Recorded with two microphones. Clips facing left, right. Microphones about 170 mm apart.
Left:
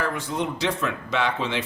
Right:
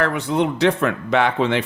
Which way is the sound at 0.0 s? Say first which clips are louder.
Right 7 dB; 70° right (ahead or behind).